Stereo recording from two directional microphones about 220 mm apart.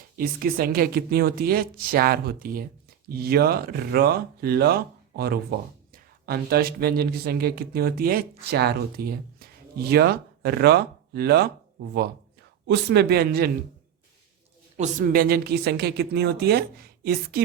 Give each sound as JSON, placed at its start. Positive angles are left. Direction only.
{"t": 0.2, "sound": "a woman's voice", "side_deg": -40}
{"t": 12.6, "sound": "speech", "side_deg": -50}
{"t": 14.8, "sound": "speech", "side_deg": -35}